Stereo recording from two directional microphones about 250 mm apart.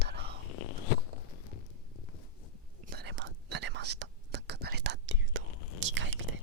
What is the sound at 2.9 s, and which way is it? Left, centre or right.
Whispering, right.